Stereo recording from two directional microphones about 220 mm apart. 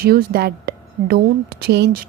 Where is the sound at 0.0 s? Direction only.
45° right (ahead or behind).